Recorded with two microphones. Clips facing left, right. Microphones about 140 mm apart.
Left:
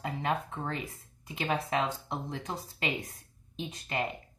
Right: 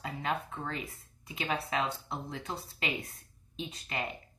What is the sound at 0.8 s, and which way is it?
Speech, 45° left (ahead or behind).